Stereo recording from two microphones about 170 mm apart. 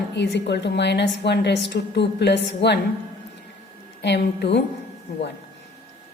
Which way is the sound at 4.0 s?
85° left.